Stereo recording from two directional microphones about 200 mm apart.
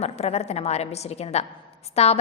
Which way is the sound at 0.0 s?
30° left (ahead or behind).